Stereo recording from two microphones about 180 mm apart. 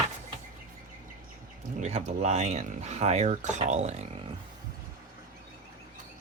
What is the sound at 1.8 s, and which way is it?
Speech, 40° right (ahead or behind).